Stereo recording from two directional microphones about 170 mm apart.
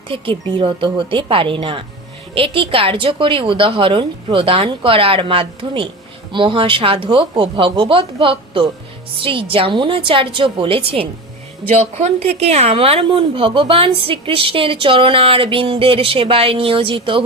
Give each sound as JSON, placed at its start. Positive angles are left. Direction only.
{"t": 0.1, "sound": "a woman's voice", "side_deg": -30}